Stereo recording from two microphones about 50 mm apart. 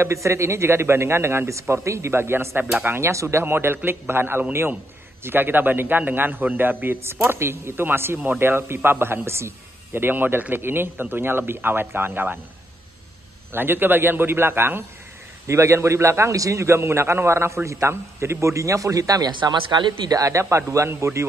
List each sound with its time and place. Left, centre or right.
0.0 s speech: right
2.1 s a man's voice: right
3.0 s a man's voice: right
3.4 s a man's voice: right
9.9 s a man's voice: right
13.5 s a man's voice: right
15.4 s a man's voice: right
20.2 s a man's voice: right